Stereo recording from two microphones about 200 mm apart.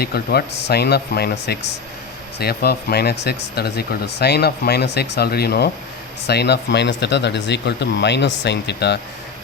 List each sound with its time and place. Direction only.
0.0 s speech: 50° left (ahead or behind)